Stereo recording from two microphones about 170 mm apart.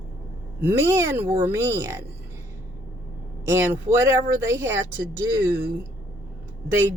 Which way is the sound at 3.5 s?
15° right (ahead or behind).